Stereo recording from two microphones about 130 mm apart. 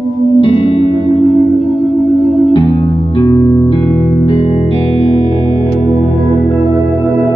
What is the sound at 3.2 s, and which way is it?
Music, 20° left (ahead or behind).